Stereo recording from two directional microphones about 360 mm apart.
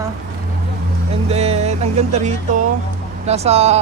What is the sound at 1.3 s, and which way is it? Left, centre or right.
Music, centre.